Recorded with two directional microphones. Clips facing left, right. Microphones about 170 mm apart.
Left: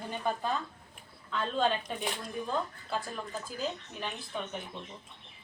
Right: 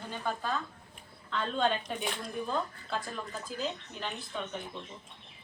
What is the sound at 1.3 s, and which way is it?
Speech, 5° left (ahead or behind).